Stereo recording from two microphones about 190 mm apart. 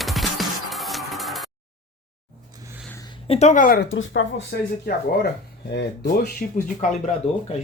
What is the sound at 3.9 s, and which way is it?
Speech, 80° left.